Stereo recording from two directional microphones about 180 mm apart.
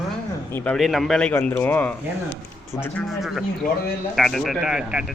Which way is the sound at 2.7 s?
15° left (ahead or behind).